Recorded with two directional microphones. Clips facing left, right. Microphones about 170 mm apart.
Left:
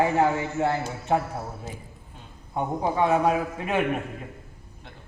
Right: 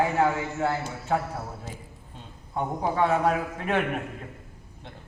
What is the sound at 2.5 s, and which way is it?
A man's voice, 15° left (ahead or behind).